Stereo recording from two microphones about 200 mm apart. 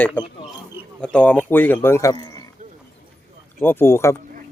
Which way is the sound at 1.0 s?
5° left (ahead or behind).